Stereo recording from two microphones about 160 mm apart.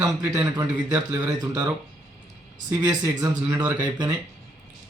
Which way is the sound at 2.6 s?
25° right (ahead or behind).